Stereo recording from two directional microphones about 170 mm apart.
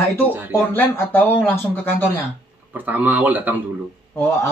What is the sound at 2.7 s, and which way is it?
Speech, 10° right (ahead or behind).